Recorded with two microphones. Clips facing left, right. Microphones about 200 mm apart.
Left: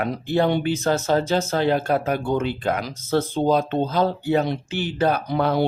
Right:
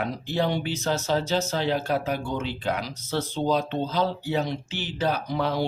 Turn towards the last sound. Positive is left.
turn(degrees=60)  # may be behind; listen again after turning